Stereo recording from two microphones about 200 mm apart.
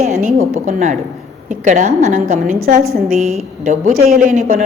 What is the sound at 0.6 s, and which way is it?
A woman's voice, 35° right (ahead or behind).